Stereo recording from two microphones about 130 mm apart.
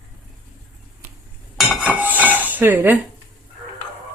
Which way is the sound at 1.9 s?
15° right (ahead or behind).